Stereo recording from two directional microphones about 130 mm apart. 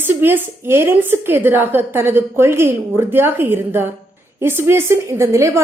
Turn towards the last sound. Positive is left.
turn(degrees=-20)  # may be behind; listen again after turning